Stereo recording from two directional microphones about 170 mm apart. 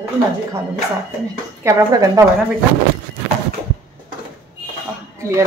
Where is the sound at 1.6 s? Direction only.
20° right (ahead or behind).